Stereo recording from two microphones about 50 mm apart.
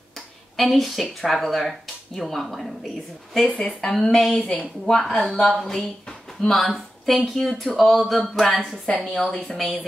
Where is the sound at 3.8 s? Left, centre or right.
Centre.